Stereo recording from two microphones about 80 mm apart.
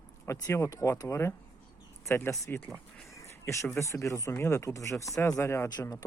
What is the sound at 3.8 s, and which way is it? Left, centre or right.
Speech, left.